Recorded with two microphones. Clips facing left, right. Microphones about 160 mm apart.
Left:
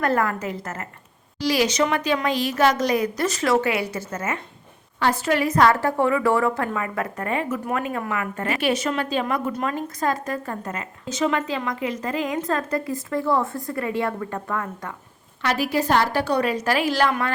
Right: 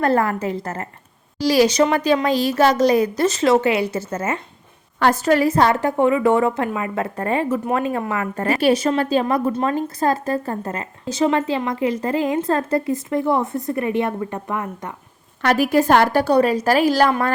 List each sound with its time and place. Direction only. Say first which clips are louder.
0.0 s a woman's voice: right 4 dB; 30° right (ahead or behind)
4.9 s a woman's voice: right 5 dB; 50° right (ahead or behind); by 14.9 s 20° right (ahead or behind)
15.4 s a woman's voice: right 6 dB; 50° right (ahead or behind)
16.2 s a woman's voice: right 6 dB; 35° right (ahead or behind)